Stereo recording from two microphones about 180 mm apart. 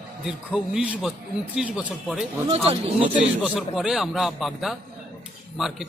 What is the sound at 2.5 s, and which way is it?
Speech, 35° right (ahead or behind).